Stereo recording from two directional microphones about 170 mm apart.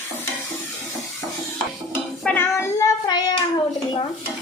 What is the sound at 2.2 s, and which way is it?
Child singing, 5° left (ahead or behind).